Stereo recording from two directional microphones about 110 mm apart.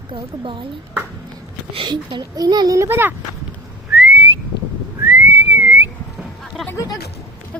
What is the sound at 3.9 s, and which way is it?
Whistling, 15° right (ahead or behind).